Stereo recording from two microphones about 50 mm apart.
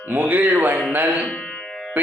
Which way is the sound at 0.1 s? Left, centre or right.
Right.